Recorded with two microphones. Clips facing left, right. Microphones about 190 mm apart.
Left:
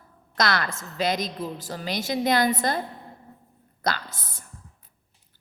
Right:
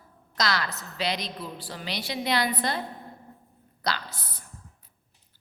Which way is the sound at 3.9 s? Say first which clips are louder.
Left 3 dB; 45° left (ahead or behind).